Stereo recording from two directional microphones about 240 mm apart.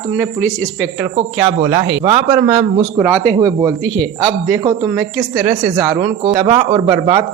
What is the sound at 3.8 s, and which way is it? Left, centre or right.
Speech, centre.